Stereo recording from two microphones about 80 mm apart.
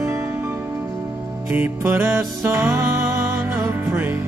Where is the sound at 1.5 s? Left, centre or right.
Right.